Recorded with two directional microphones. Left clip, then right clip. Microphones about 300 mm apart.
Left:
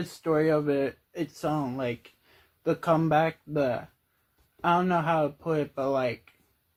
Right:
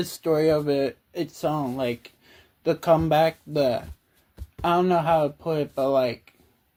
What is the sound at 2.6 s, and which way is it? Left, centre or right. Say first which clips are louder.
Speech: right 5 dB; right.